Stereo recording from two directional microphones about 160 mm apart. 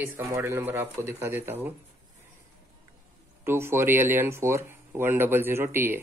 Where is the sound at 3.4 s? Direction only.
15° right (ahead or behind).